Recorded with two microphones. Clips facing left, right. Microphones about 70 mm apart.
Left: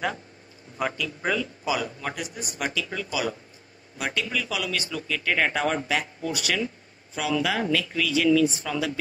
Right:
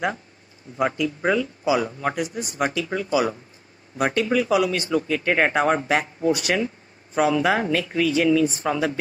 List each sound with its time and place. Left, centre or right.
0.7 s speech: right